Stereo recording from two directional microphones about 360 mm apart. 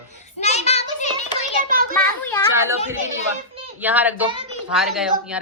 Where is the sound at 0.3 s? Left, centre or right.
Centre.